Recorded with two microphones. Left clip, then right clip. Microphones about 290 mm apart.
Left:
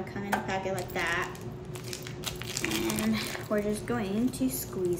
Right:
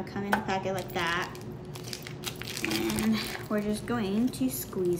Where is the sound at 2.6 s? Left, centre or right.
Centre.